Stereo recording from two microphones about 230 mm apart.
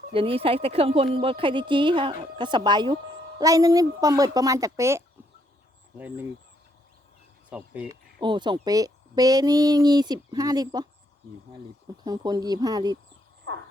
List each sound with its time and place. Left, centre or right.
0.1 s a woman's voice: right; by 6.2 s centre
7.5 s speech: centre
8.2 s speech: centre
12.0 s speech: centre